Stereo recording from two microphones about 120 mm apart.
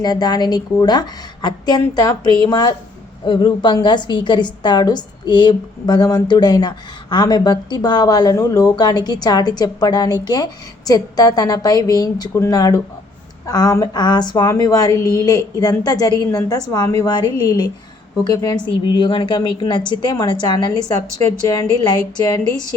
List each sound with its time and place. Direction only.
0.0 s a woman's voice: 35° left (ahead or behind)
18.9 s a woman's voice: 45° left (ahead or behind)